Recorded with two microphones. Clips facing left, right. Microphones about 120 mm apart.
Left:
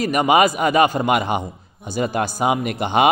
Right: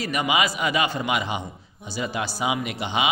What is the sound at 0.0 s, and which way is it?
Speech, 50° left (ahead or behind).